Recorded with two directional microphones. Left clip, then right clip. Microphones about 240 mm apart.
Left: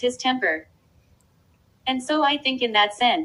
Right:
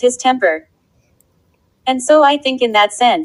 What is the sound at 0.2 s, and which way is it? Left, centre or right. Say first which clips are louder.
Speech: right 9 dB; centre.